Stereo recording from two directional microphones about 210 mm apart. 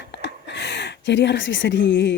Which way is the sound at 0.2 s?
55° left (ahead or behind).